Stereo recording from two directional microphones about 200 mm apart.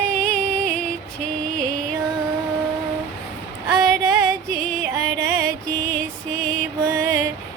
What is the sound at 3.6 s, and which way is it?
Female singing, 15° right (ahead or behind).